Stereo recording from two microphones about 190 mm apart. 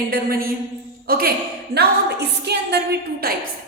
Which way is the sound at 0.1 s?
50° right (ahead or behind).